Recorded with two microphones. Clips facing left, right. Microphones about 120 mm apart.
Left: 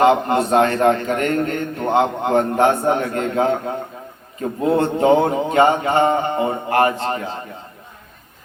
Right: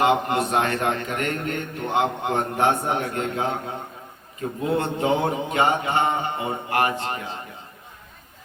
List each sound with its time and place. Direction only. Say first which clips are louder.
0.0 s a man's voice: left 5 dB; 35° left (ahead or behind)
4.8 s a man's voice: left 9 dB; 40° left (ahead or behind)